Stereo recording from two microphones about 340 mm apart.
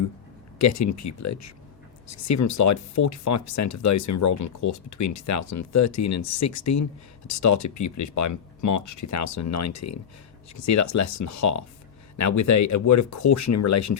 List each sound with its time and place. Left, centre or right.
0.6 s speech: left